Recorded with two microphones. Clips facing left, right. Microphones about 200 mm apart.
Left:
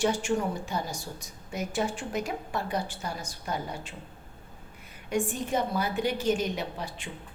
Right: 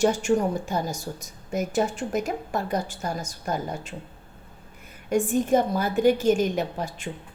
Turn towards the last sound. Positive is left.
turn(degrees=-45)  # may be behind; listen again after turning